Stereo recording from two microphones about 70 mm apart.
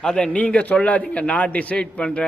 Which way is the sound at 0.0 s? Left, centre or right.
Centre.